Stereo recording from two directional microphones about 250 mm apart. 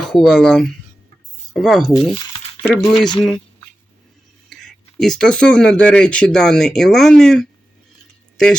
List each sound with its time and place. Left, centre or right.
0.0 s speech: centre
2.1 s a sound: centre
2.7 s speech: centre
4.4 s speech: centre